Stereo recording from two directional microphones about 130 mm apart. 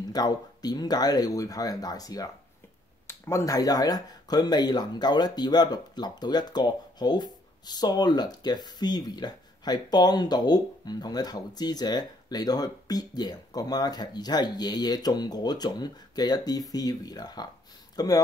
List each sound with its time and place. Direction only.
0.1 s speech: 30° left (ahead or behind)